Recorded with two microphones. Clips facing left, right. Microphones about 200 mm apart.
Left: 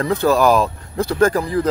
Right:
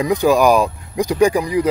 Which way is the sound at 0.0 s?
15° right (ahead or behind).